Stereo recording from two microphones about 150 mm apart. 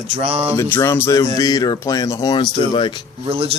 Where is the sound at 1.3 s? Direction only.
25° left (ahead or behind).